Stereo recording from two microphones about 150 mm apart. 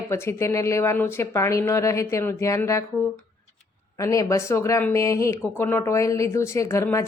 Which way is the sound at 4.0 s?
20° left (ahead or behind).